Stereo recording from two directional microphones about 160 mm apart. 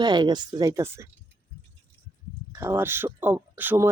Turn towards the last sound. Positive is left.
turn(degrees=-10)  # may be behind; listen again after turning